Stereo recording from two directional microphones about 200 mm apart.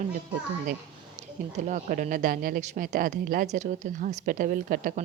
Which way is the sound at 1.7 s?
40° right (ahead or behind).